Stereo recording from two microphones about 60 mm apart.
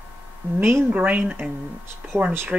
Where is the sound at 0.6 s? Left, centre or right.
Right.